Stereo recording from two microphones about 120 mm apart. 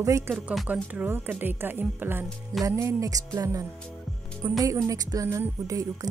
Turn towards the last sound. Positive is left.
turn(degrees=-30)  # may be behind; listen again after turning